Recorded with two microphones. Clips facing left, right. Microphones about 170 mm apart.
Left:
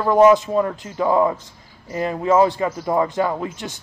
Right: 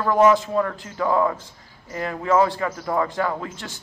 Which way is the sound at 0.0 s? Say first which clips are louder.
Left 4 dB; 20° left (ahead or behind).